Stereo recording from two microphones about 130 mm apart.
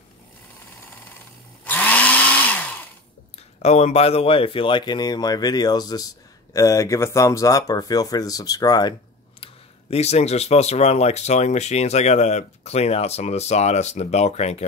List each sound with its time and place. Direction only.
1.6 s chainsaw: 15° left (ahead or behind)
3.6 s speech: 55° left (ahead or behind); by 8.9 s 30° left (ahead or behind)
9.4 s speech: 55° left (ahead or behind)